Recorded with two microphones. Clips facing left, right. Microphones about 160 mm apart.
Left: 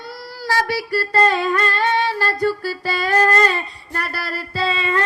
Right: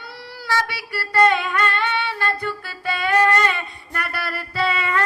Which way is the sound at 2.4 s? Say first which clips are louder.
Left 7 dB; 35° left (ahead or behind).